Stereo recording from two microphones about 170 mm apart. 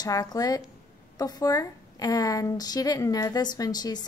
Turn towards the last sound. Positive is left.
turn(degrees=25)  # may be behind; listen again after turning